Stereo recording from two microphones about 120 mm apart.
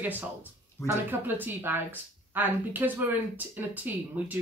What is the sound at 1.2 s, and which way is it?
A woman's voice, 15° right (ahead or behind).